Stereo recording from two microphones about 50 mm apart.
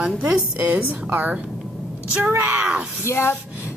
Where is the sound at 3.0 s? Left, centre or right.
Left.